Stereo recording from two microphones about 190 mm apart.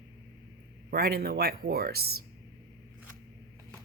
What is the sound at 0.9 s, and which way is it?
Speech, 55° right (ahead or behind).